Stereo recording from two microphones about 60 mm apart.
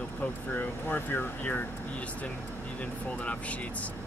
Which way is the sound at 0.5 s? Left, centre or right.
Left.